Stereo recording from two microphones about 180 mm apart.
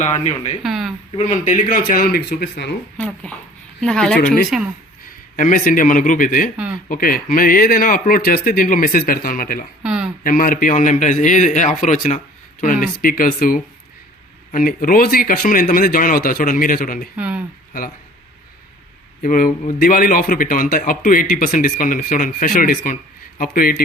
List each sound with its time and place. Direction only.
0.0 s speech: 40° left (ahead or behind)
0.6 s a sound: centre (ahead or behind)
1.1 s a man's voice: 45° left (ahead or behind); by 2.7 s 70° left (ahead or behind)
3.0 s speech: 5° left (ahead or behind)
4.2 s a man's voice: 50° left (ahead or behind)
4.4 s speech: centre (ahead or behind)
5.4 s a man's voice: 50° left (ahead or behind)
9.8 s a sound: 5° right (ahead or behind)
10.2 s a man's voice: 50° left (ahead or behind)
17.2 s speech: 10° right (ahead or behind)
19.2 s a man's voice: 50° left (ahead or behind)